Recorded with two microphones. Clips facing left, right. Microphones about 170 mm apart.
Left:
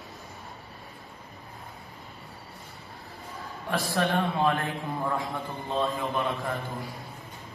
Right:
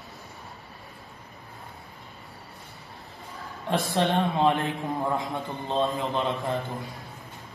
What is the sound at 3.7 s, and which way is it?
A man's voice, 20° right (ahead or behind).